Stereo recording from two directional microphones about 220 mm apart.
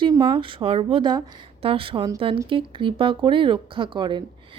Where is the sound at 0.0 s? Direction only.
20° right (ahead or behind).